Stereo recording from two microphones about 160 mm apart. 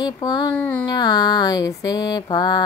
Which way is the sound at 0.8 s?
25° left (ahead or behind).